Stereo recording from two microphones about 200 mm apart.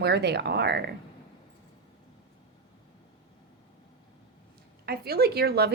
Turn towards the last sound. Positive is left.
turn(degrees=-50)  # may be behind; listen again after turning